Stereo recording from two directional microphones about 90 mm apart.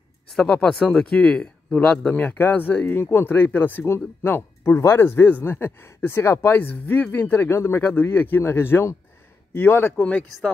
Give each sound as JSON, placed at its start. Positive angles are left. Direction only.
{"t": 0.3, "sound": "speech", "side_deg": 10}